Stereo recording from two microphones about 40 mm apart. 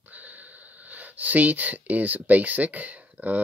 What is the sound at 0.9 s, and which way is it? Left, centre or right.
Speech, right.